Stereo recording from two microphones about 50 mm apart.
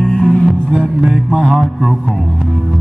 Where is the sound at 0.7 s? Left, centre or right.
Centre.